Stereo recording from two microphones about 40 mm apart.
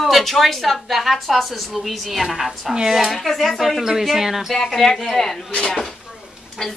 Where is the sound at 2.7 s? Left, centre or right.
Centre.